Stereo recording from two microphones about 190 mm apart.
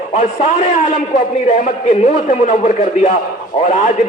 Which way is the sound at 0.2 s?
40° left (ahead or behind).